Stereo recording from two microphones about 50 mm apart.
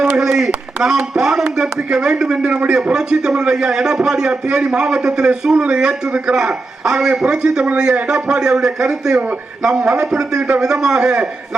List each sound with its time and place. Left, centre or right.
0.0 s a man's voice: centre